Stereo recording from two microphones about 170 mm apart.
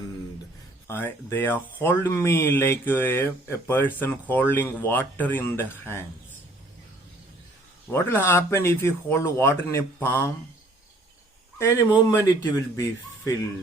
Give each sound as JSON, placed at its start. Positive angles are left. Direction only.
{"t": 0.9, "sound": "speech", "side_deg": 15}
{"t": 7.9, "sound": "speech", "side_deg": 15}
{"t": 11.5, "sound": "speech", "side_deg": 15}